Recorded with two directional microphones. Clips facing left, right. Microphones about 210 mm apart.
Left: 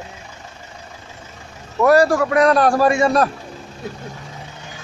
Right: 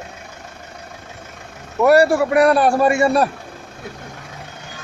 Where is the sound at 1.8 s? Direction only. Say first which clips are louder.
Right 1 dB; 10° right (ahead or behind).